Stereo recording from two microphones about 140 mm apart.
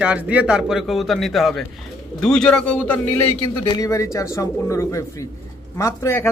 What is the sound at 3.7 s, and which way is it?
Speech, 25° left (ahead or behind).